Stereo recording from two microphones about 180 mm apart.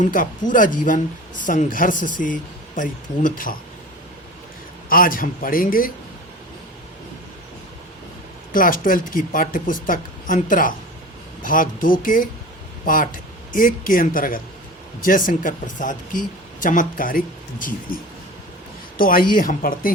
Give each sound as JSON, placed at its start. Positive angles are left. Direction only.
{"t": 0.0, "sound": "speech", "side_deg": 50}
{"t": 4.9, "sound": "speech", "side_deg": 50}
{"t": 8.5, "sound": "a man's voice", "side_deg": 50}
{"t": 18.9, "sound": "speech", "side_deg": 50}